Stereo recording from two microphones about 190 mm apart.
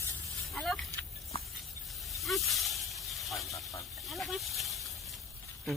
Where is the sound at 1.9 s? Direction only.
Centre (ahead or behind).